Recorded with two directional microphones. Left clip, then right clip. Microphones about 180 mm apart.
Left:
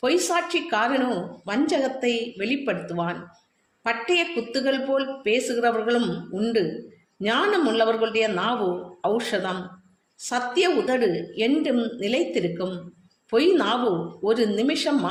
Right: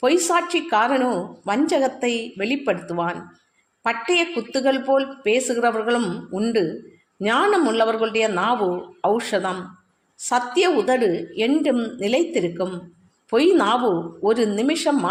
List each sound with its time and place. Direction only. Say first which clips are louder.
0.0 s a woman's voice: right 4 dB; 45° right (ahead or behind)